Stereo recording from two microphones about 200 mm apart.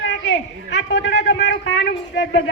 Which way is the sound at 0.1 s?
60° left (ahead or behind).